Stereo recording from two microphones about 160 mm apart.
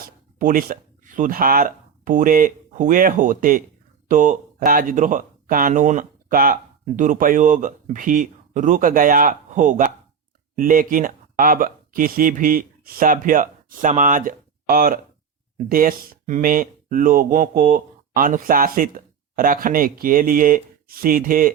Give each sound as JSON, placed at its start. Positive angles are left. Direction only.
{"t": 0.0, "sound": "speech", "side_deg": -60}